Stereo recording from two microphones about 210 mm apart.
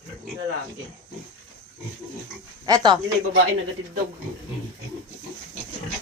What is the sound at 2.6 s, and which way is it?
Speech, 20° right (ahead or behind).